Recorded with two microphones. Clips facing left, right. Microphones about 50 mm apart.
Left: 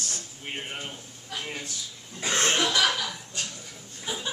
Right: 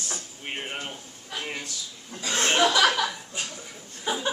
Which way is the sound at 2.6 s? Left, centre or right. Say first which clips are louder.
Right 4 dB; right.